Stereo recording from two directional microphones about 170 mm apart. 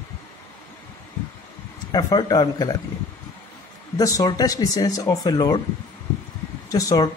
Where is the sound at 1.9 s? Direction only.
25° left (ahead or behind).